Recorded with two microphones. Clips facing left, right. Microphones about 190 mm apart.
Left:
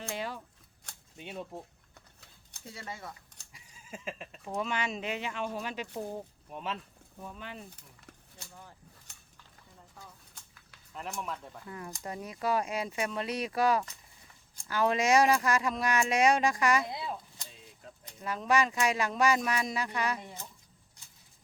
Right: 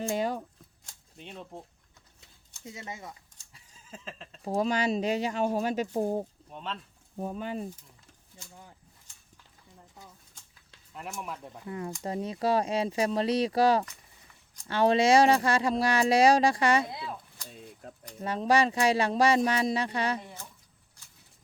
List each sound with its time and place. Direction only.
0.1 s speech: 45° right (ahead or behind)
1.1 s speech: 5° left (ahead or behind)
2.6 s speech: 20° right (ahead or behind)
3.5 s a sound: 10° left (ahead or behind)
4.4 s speech: 35° right (ahead or behind)
6.5 s speech: 5° left (ahead or behind)
7.2 s speech: 40° right (ahead or behind)
9.1 s a sound: 65° left (ahead or behind)
11.2 s speech: 15° right (ahead or behind); by 16.8 s 30° right (ahead or behind)
17.5 s a sound: 50° right (ahead or behind)
18.2 s speech: 30° right (ahead or behind)